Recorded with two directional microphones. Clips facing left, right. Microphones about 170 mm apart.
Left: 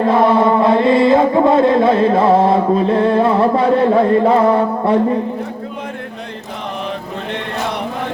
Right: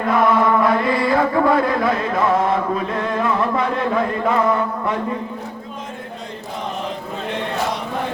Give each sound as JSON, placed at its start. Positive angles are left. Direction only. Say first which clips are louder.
{"t": 0.0, "sound": "chant", "louder": "left 4 dB", "side_deg": 30}